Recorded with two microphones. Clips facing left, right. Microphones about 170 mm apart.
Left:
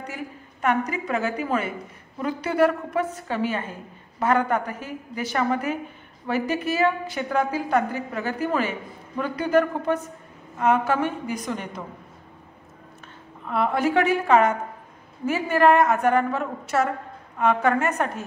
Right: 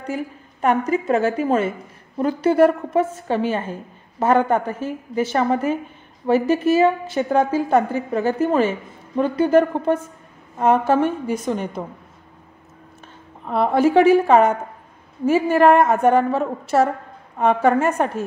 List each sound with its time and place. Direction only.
0.0 s a woman's voice: 30° right (ahead or behind)
13.5 s a woman's voice: 30° right (ahead or behind)